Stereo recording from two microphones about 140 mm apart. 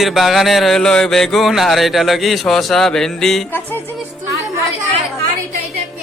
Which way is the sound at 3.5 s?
15° left (ahead or behind).